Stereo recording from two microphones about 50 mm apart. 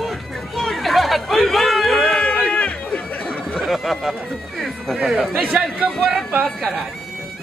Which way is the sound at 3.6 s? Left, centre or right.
Centre.